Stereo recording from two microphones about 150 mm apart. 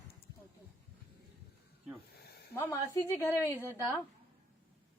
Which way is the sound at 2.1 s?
90° left.